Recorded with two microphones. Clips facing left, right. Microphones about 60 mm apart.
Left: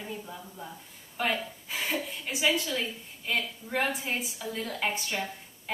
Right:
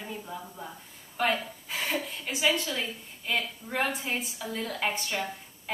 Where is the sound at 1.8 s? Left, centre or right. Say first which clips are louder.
Right 1 dB; centre.